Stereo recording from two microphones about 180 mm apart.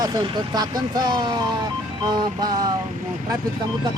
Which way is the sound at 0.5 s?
20° right (ahead or behind).